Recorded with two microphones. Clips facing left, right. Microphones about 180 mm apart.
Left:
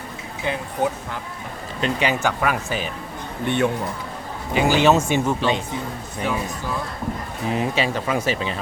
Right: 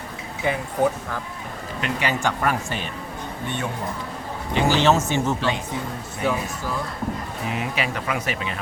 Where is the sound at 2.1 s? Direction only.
5° left (ahead or behind).